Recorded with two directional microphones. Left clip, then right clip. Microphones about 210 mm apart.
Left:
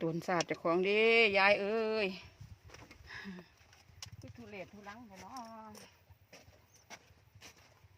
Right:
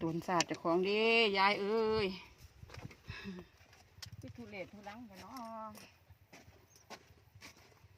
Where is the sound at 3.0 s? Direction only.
30° left (ahead or behind).